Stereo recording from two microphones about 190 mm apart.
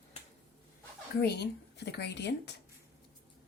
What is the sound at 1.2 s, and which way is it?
A woman's voice, 60° left (ahead or behind).